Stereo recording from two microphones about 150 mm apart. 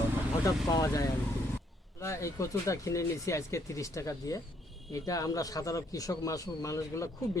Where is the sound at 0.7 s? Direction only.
25° left (ahead or behind).